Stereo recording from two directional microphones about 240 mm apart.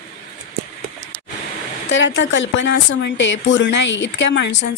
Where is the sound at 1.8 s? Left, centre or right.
Left.